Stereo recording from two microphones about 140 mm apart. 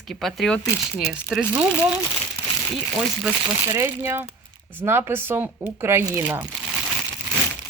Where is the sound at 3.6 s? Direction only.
25° right (ahead or behind).